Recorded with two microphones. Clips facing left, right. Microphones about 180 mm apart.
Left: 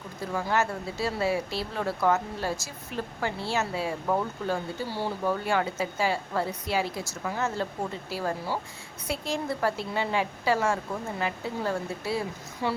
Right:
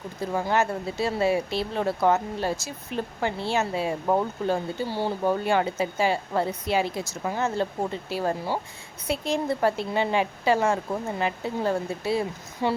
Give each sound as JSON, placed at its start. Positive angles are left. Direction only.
{"t": 0.3, "sound": "speech", "side_deg": -20}